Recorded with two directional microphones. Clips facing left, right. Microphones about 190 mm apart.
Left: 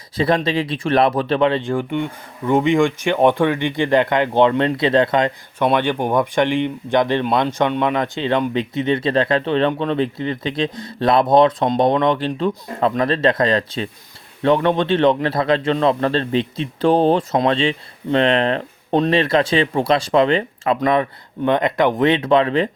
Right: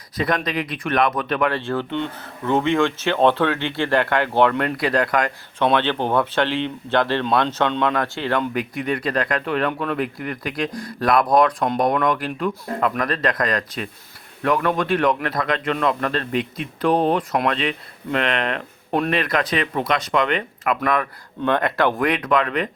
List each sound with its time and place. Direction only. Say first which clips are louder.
0.2 s speech: left 5 dB; 30° left (ahead or behind)
5.5 s speech: left 1 dB; 10° left (ahead or behind); by 22.7 s 30° left (ahead or behind)